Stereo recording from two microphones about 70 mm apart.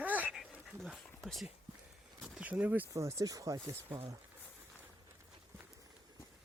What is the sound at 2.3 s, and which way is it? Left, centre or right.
Speech, centre.